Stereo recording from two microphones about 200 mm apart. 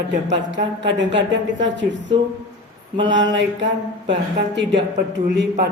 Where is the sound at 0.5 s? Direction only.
65° right (ahead or behind).